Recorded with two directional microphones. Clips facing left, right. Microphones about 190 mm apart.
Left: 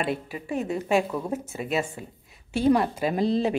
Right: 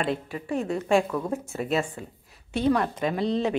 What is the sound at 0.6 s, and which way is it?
Speech, 20° left (ahead or behind).